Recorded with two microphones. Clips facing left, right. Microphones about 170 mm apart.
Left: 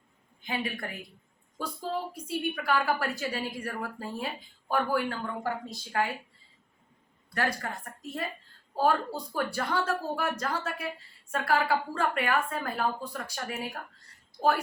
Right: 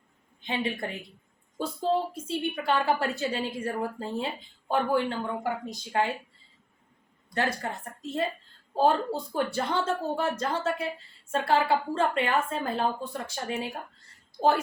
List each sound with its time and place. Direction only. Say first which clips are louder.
0.4 s speech: right 3 dB; 25° right (ahead or behind)
7.3 s speech: right 2 dB; 25° right (ahead or behind)